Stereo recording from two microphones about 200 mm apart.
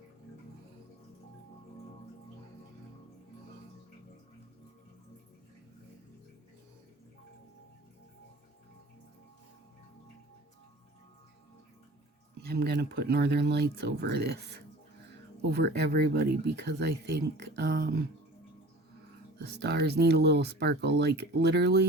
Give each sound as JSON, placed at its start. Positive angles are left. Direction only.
{"t": 12.5, "sound": "speech", "side_deg": -55}
{"t": 19.4, "sound": "speech", "side_deg": -55}